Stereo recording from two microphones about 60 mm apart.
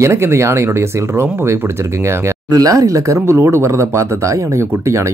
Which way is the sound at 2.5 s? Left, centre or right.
Right.